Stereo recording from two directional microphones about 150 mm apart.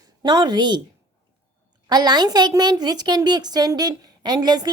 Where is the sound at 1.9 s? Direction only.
30° right (ahead or behind).